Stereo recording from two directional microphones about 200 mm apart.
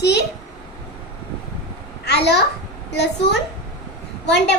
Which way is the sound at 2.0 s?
55° left (ahead or behind).